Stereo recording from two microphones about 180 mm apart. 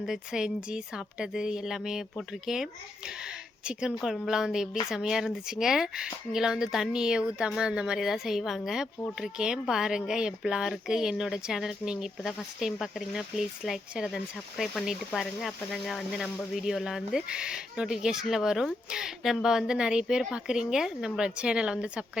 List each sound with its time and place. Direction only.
0.0 s speech: 5° right (ahead or behind)
3.7 s speech: 5° right (ahead or behind)